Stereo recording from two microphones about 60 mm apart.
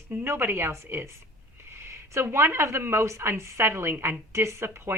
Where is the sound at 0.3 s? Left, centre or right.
Right.